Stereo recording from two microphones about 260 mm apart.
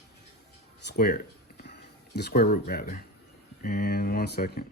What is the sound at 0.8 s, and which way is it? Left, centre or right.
Speech, left.